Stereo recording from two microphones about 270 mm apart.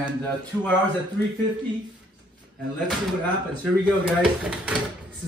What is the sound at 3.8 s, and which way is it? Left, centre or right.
Speech, centre.